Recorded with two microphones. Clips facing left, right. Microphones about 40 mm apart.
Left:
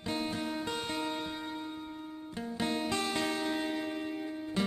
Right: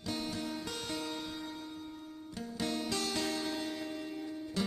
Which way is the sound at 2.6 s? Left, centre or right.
Left.